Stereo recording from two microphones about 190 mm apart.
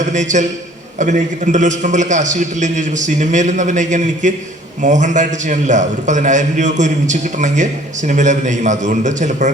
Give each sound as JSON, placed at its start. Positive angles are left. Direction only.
{"t": 0.0, "sound": "a man's voice", "side_deg": -40}